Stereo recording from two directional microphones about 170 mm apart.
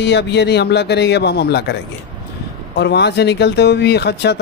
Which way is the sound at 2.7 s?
90° left.